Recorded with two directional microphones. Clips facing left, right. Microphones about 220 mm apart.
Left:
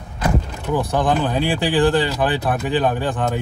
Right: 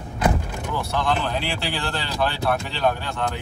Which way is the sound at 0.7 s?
15° left (ahead or behind).